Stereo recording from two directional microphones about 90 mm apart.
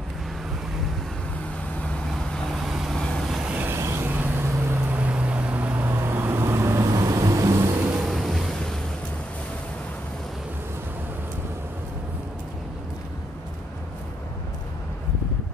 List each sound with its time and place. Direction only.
1.8 s vehicle: 5° left (ahead or behind)
3.4 s vehicle: 20° right (ahead or behind)
3.7 s vehicle: 30° right (ahead or behind)
7.8 s vehicle: 10° right (ahead or behind)
8.1 s waves: centre (ahead or behind)